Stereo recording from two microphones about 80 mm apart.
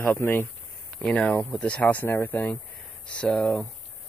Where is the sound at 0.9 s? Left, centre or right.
Centre.